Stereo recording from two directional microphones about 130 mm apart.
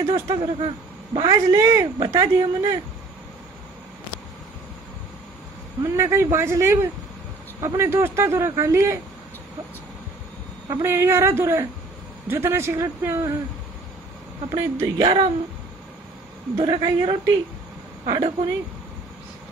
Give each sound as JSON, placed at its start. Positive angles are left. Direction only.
{"t": 0.1, "sound": "a man's voice", "side_deg": -40}
{"t": 1.2, "sound": "speech", "side_deg": -30}
{"t": 5.9, "sound": "speech", "side_deg": -20}
{"t": 10.7, "sound": "speech", "side_deg": -20}
{"t": 14.5, "sound": "speech", "side_deg": -35}
{"t": 16.5, "sound": "speech", "side_deg": -35}